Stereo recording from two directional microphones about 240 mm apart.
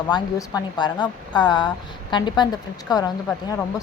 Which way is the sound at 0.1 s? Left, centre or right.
Centre.